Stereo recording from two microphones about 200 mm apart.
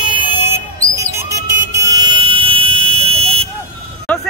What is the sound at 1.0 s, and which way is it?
Vehicle, 15° right (ahead or behind).